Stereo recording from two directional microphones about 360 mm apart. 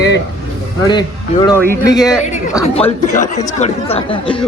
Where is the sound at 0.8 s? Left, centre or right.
Centre.